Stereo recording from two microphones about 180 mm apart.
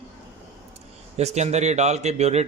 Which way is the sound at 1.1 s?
40° right (ahead or behind).